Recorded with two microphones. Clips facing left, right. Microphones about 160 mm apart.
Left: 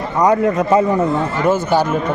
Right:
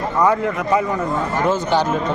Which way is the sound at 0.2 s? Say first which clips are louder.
Left 4 dB; 20° left (ahead or behind).